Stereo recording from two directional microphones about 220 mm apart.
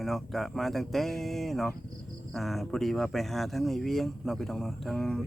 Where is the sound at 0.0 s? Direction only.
Centre (ahead or behind).